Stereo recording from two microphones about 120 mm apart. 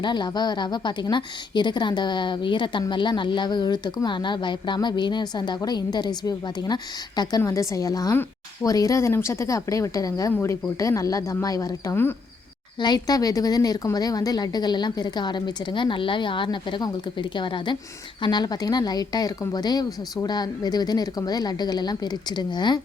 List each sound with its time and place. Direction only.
0.0 s a woman's voice: 40° left (ahead or behind)